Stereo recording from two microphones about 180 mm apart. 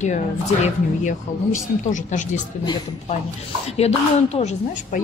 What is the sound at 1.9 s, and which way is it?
Speech, 45° left (ahead or behind).